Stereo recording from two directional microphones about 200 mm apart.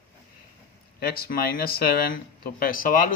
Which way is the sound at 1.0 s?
50° left (ahead or behind).